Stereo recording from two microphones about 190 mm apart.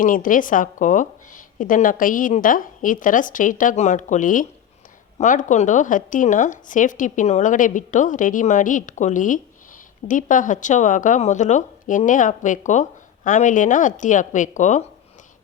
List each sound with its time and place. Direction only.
0.0 s a woman's voice: 45° left (ahead or behind)